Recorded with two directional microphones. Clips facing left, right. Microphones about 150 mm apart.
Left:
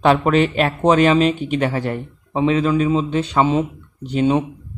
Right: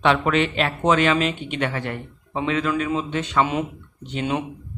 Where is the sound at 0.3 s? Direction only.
40° left (ahead or behind).